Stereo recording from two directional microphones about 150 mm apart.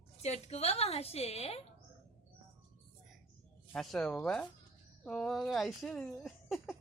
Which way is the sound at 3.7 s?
5° left (ahead or behind).